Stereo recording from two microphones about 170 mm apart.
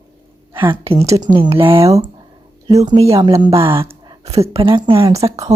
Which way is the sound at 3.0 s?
20° right (ahead or behind).